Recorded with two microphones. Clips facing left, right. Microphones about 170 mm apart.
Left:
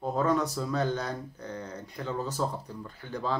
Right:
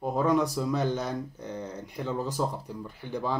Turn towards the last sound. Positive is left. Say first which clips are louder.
# right 1 dB
turn(degrees=-15)  # may be behind; listen again after turning